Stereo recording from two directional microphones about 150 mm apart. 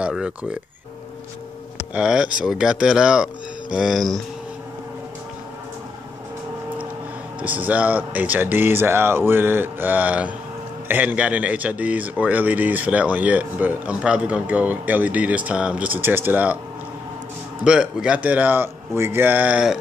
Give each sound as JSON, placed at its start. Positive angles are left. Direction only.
{"t": 0.0, "sound": "a man's voice", "side_deg": -5}
{"t": 2.0, "sound": "speech", "side_deg": -5}
{"t": 7.4, "sound": "a man's voice", "side_deg": -10}
{"t": 17.6, "sound": "a man's voice", "side_deg": -5}